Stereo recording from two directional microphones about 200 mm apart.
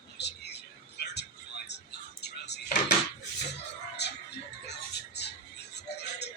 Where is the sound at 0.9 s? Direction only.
55° left (ahead or behind).